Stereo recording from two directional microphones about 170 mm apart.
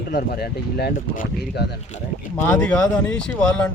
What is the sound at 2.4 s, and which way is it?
Speech, 5° left (ahead or behind).